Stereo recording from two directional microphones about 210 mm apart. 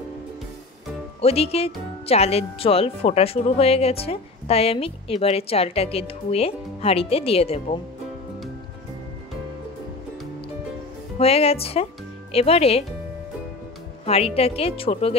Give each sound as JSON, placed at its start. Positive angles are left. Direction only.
{"t": 1.2, "sound": "speech", "side_deg": 30}
{"t": 11.1, "sound": "speech", "side_deg": 30}
{"t": 14.0, "sound": "speech", "side_deg": 30}